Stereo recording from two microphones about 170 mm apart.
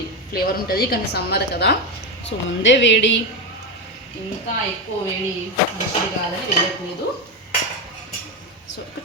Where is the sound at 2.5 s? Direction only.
90° left.